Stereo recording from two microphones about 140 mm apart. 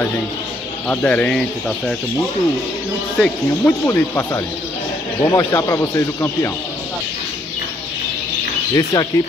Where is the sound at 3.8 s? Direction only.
20° left (ahead or behind).